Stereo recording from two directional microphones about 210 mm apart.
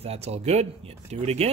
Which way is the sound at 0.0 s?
30° right (ahead or behind).